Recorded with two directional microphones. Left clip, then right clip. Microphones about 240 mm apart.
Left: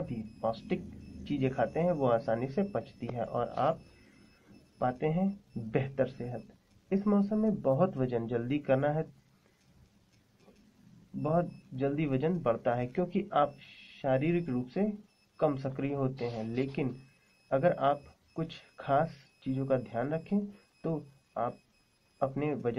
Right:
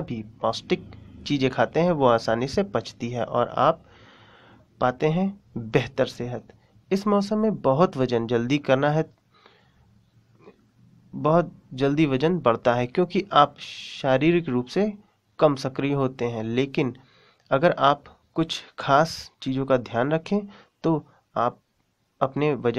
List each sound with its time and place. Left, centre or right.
0.1 s speech: right
4.7 s speech: right
11.2 s speech: right